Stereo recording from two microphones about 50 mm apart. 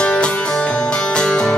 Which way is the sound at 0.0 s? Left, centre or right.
Centre.